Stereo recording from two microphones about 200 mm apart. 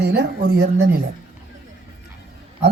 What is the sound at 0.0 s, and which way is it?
Speech, 55° right (ahead or behind).